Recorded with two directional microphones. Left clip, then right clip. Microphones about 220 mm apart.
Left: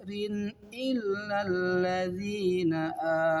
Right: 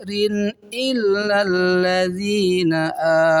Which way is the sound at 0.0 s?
45° right (ahead or behind).